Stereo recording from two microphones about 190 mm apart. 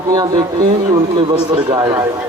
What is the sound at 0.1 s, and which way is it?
Speech, 20° right (ahead or behind).